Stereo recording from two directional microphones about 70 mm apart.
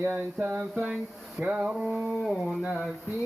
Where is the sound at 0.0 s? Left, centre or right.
Right.